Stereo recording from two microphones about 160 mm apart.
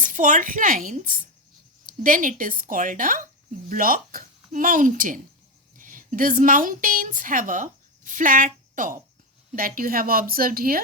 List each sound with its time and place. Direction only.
0.0 s a woman's voice: 55° right (ahead or behind)